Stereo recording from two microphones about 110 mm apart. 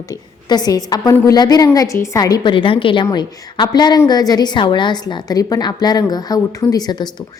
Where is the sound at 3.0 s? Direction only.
40° left (ahead or behind).